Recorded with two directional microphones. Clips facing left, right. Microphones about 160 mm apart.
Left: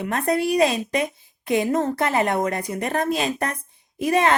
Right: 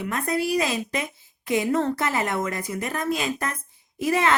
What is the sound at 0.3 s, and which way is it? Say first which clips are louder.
Speech: left 5 dB; 25° left (ahead or behind).